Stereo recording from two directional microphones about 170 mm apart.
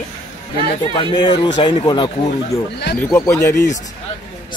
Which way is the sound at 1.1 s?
25° left (ahead or behind).